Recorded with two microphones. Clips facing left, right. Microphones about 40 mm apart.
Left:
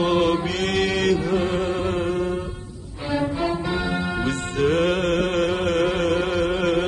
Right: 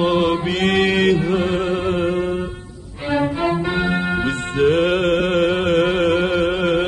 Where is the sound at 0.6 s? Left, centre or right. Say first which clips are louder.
Right 5 dB; right.